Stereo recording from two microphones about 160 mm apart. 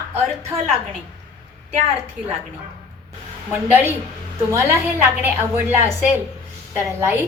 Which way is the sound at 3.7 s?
10° right (ahead or behind).